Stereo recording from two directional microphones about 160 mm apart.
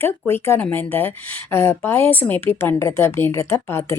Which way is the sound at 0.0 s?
15° left (ahead or behind).